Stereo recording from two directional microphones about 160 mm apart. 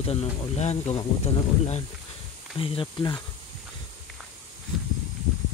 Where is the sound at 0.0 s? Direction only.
40° left (ahead or behind).